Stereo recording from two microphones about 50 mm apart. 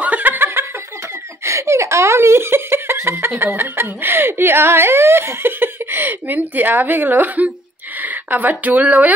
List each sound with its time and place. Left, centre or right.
0.0 s laughter: right
1.4 s speech: right